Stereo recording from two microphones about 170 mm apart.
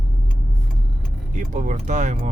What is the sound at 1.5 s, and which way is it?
Speech, 45° right (ahead or behind).